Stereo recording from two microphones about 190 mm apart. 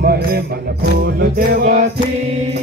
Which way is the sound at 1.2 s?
50° right (ahead or behind).